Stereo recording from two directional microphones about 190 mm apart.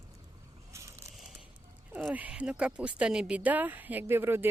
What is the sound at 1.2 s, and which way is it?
Speech, 5° right (ahead or behind).